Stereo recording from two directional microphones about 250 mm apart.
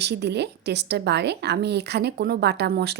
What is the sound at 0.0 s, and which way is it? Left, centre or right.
A woman's voice, right.